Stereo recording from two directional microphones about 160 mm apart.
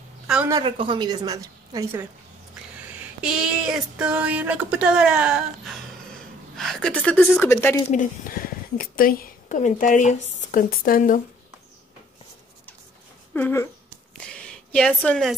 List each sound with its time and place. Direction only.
0.5 s a woman's voice: 30° right (ahead or behind)
3.2 s speech: 5° right (ahead or behind); by 7.8 s 15° left (ahead or behind)
7.9 s speech: 55° left (ahead or behind)
13.3 s speech: 10° left (ahead or behind)
14.3 s a sound: 5° left (ahead or behind)